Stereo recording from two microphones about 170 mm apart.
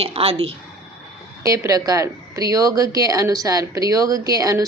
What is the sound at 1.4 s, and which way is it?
Speech, 20° right (ahead or behind).